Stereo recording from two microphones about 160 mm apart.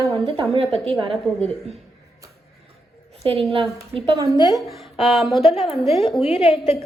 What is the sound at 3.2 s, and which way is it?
Speech, 35° right (ahead or behind).